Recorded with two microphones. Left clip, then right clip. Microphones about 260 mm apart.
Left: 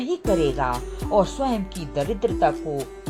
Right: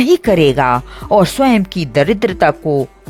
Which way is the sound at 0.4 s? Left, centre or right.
Right.